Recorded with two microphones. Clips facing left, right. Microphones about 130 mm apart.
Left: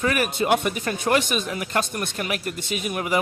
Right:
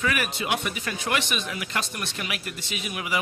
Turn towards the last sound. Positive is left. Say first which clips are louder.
# left 6 dB
turn(degrees=45)  # may be behind; listen again after turning